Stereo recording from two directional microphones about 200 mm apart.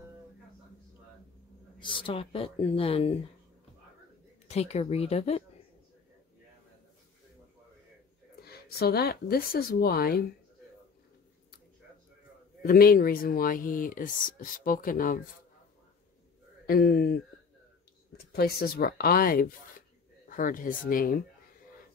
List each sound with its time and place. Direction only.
1.8 s speech: 25° left (ahead or behind)
4.5 s speech: 30° left (ahead or behind)
8.4 s speech: 50° left (ahead or behind)
12.6 s speech: 50° left (ahead or behind)
16.6 s speech: 50° left (ahead or behind)